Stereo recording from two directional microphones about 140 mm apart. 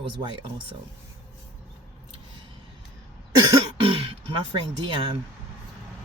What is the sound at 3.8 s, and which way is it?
Throat clearing, 40° right (ahead or behind).